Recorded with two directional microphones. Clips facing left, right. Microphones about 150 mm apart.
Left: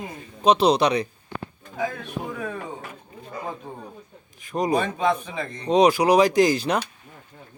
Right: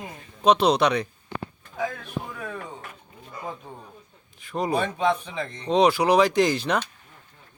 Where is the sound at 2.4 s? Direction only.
10° left (ahead or behind).